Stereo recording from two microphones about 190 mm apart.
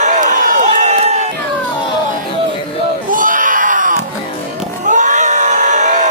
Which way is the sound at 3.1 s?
45° right (ahead or behind).